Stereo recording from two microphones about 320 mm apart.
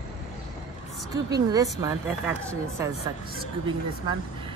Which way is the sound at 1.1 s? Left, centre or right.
Centre.